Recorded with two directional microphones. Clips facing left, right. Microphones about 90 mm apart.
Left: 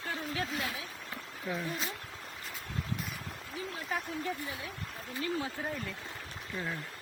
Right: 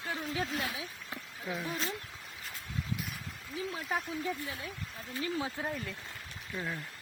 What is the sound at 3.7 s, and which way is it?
Speech, centre (ahead or behind).